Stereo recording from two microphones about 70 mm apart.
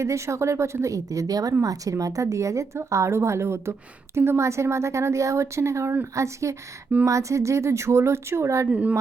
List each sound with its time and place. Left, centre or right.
0.0 s a woman's voice: right
8.6 s speech: right